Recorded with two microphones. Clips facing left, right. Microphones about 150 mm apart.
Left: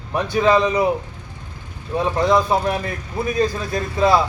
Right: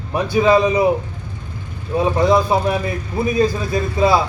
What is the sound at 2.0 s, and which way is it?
A man's voice, 10° right (ahead or behind).